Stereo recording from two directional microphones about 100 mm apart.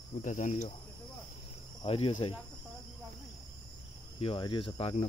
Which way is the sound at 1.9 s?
70° left (ahead or behind).